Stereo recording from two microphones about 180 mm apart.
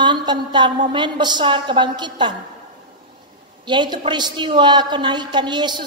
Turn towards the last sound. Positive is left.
turn(degrees=-25)  # may be behind; listen again after turning